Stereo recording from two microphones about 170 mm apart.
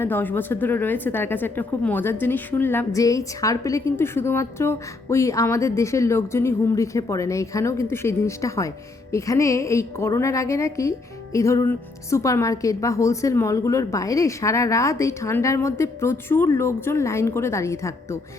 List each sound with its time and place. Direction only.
0.0 s speech: 10° left (ahead or behind)